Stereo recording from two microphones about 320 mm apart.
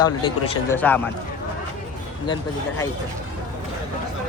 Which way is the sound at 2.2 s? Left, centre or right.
Centre.